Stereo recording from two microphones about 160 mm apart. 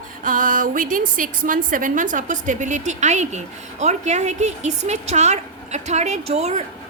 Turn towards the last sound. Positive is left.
turn(degrees=-45)  # may be behind; listen again after turning